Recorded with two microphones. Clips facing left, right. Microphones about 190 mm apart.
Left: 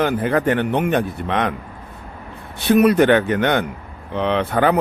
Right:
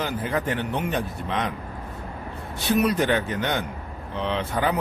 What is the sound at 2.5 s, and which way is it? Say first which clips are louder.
Speech: left 8 dB; 60° left (ahead or behind).